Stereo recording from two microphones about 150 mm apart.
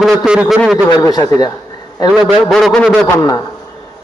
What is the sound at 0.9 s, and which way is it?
Speech, 25° left (ahead or behind).